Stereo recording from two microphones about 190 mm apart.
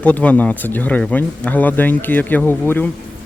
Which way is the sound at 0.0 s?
5° left (ahead or behind).